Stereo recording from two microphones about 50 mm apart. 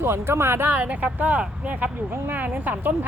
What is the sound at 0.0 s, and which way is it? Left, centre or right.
Speech, right.